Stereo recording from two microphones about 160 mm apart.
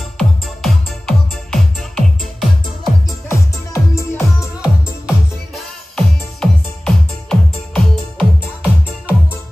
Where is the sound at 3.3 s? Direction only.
20° left (ahead or behind).